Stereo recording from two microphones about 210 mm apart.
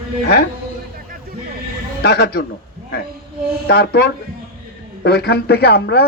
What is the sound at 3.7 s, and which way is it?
A man's voice, 50° left (ahead or behind).